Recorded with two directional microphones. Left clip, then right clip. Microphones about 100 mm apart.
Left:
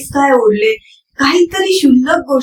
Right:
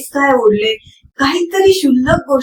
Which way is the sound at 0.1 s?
5° right (ahead or behind).